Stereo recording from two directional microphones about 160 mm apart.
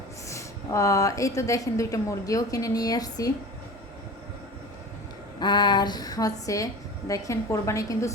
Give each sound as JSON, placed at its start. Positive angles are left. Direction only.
{"t": 0.3, "sound": "a woman's voice", "side_deg": 20}
{"t": 5.4, "sound": "a woman's voice", "side_deg": 25}